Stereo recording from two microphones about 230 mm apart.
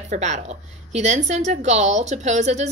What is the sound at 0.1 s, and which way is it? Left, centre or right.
A woman's voice, right.